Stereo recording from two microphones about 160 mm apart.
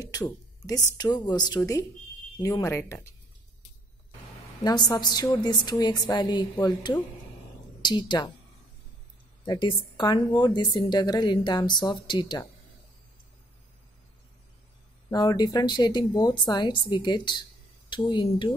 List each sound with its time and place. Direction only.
0.9 s speech: 25° left (ahead or behind)
4.6 s speech: 25° left (ahead or behind)
9.4 s speech: 25° left (ahead or behind)
15.0 s speech: 25° left (ahead or behind)